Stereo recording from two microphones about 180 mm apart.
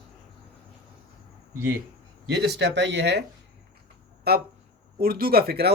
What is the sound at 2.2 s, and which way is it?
Speech, 70° right (ahead or behind).